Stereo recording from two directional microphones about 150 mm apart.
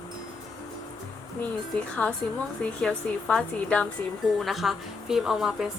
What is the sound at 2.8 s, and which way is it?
A woman's voice, 5° left (ahead or behind).